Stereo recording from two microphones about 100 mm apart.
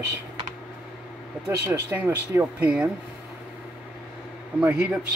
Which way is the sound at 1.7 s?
20° right (ahead or behind).